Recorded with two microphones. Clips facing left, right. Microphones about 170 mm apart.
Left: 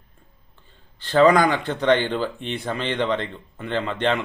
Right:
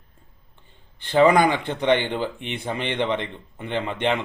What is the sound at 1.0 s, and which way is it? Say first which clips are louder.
A man's voice: left 1 dB; 20° right (ahead or behind).